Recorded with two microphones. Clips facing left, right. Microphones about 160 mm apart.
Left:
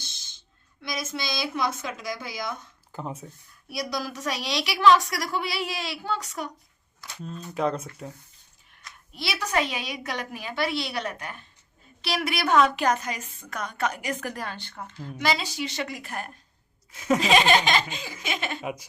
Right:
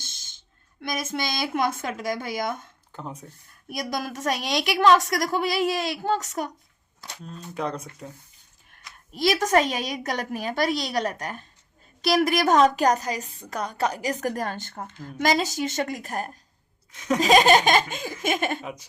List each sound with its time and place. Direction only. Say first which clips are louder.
0.8 s a woman's voice: right 4 dB; 50° right (ahead or behind)
2.9 s speech: left 2 dB; 5° left (ahead or behind)
3.7 s a woman's voice: right 1 dB; 50° right (ahead or behind)
7.2 s speech: left 3 dB; centre (ahead or behind)
8.7 s a sound: even; 45° right (ahead or behind)
9.1 s a woman's voice: right 7 dB; 45° right (ahead or behind)
16.9 s laughter: left 2 dB; 5° left (ahead or behind)
17.2 s a woman's voice: right 5 dB; 40° right (ahead or behind)
18.6 s laughter: left 3 dB; 10° left (ahead or behind)